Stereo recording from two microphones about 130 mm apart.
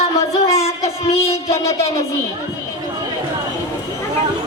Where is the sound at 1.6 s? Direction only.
50° left (ahead or behind).